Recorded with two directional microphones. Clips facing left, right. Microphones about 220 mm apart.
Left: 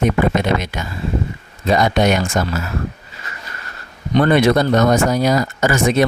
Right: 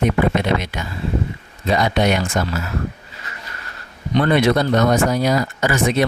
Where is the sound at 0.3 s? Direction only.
45° left (ahead or behind).